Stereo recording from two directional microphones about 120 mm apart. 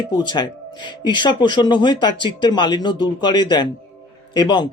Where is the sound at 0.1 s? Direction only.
40° left (ahead or behind).